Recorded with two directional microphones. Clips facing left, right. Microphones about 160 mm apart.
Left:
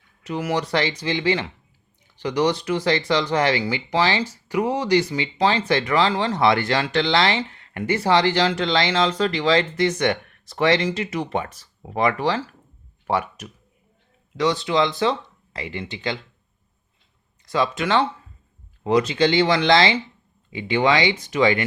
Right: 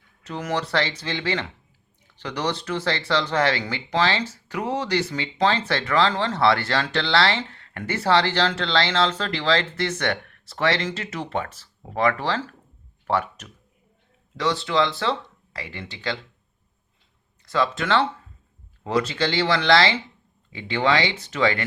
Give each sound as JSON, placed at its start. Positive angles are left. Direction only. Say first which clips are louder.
{"t": 0.3, "sound": "speech", "louder": "left 3 dB", "side_deg": 10}
{"t": 17.4, "sound": "speech", "louder": "left 1 dB", "side_deg": 15}